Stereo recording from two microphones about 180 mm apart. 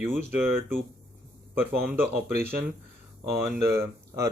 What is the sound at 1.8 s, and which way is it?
Speech, 10° right (ahead or behind).